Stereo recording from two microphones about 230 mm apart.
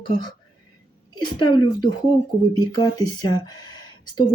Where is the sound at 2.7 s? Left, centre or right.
Centre.